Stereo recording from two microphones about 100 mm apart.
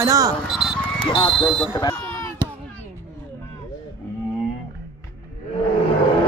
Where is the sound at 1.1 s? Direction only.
50° left (ahead or behind).